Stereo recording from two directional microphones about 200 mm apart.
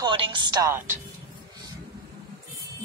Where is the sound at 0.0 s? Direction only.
25° right (ahead or behind).